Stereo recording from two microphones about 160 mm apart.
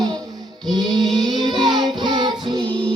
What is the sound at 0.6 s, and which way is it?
Music, centre (ahead or behind).